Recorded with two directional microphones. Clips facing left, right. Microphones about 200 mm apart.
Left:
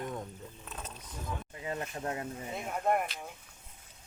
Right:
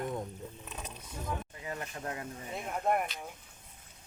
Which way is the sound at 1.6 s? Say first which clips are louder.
Left 3 dB; 25° left (ahead or behind).